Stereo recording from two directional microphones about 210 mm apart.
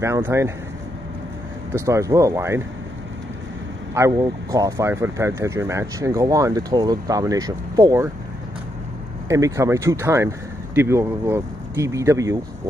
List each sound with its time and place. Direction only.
0.0 s speech: 15° right (ahead or behind)
1.9 s speech: 15° right (ahead or behind)
3.9 s speech: 15° right (ahead or behind)
9.3 s speech: 15° right (ahead or behind)